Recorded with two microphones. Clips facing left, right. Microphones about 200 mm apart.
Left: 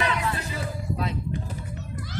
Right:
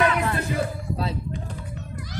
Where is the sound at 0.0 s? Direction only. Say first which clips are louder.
Right 5 dB; 55° right (ahead or behind).